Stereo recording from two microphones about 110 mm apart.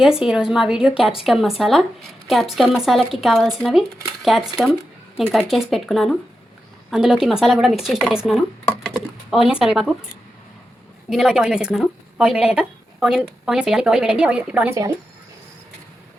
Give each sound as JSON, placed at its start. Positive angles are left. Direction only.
{"t": 0.0, "sound": "speech", "side_deg": -5}
{"t": 11.1, "sound": "a woman's voice", "side_deg": -5}
{"t": 14.7, "sound": "speech", "side_deg": -25}